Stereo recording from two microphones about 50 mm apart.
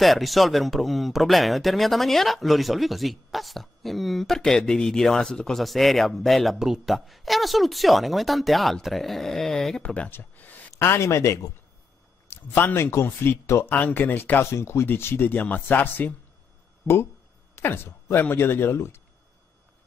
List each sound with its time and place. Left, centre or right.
0.0 s speech: centre
5.6 s speech: centre
9.8 s speech: left
10.1 s a sound: left
10.8 s speech: left
12.3 s speech: left
13.7 s speech: left
14.4 s speech: left
14.9 s speech: left
16.8 s speech: left